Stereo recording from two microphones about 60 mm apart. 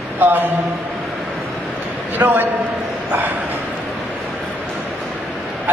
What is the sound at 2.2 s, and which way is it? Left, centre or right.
Speech, right.